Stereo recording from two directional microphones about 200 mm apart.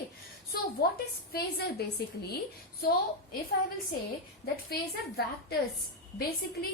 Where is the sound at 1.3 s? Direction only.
50° left (ahead or behind).